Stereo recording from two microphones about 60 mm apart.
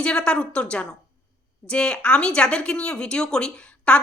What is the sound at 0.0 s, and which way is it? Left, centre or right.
A woman's voice, centre.